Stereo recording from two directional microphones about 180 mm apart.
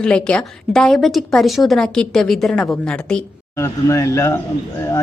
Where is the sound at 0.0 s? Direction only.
5° left (ahead or behind).